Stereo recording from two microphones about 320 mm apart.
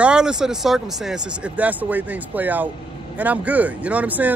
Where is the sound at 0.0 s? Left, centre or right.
Centre.